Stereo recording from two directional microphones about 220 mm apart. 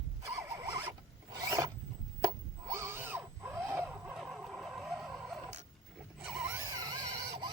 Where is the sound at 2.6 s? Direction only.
10° right (ahead or behind).